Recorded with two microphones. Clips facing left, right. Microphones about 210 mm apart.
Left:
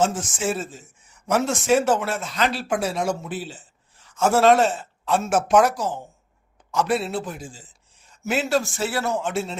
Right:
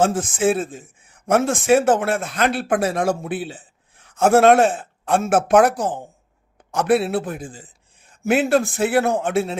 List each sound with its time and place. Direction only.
0.0 s a man's voice: 55° right (ahead or behind)